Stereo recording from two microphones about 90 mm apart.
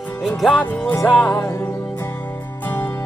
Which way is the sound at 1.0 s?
20° left (ahead or behind).